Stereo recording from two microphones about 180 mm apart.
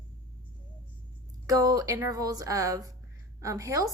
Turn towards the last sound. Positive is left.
turn(degrees=-20)  # may be behind; listen again after turning